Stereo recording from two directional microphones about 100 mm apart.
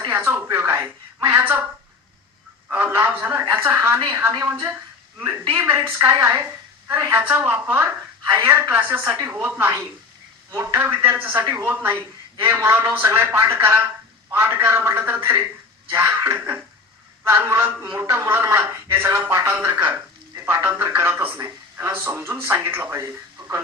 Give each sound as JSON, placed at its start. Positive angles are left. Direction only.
{"t": 0.1, "sound": "speech", "side_deg": -25}
{"t": 2.6, "sound": "speech", "side_deg": -20}